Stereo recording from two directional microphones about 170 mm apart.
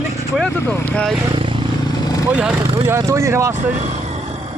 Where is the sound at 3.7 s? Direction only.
45° right (ahead or behind).